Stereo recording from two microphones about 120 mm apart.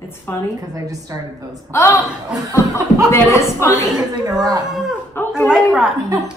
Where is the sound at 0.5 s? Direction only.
30° right (ahead or behind).